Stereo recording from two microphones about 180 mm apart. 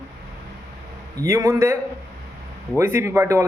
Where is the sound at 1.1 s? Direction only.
20° right (ahead or behind).